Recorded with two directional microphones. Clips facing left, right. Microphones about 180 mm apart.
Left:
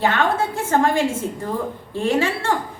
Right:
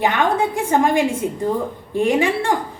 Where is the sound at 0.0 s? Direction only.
15° right (ahead or behind).